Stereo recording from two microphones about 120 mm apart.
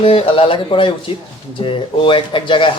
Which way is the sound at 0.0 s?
50° left (ahead or behind).